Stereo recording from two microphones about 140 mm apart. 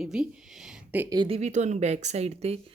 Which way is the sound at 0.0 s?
5° right (ahead or behind).